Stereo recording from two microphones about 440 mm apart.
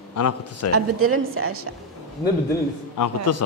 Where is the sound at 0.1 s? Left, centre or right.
Left.